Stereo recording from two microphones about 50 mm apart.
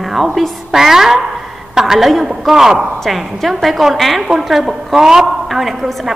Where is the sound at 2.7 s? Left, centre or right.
Right.